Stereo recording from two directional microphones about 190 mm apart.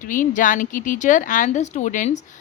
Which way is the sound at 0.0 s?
45° left (ahead or behind).